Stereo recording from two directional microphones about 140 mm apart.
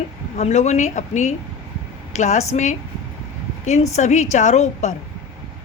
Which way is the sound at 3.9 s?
55° left (ahead or behind).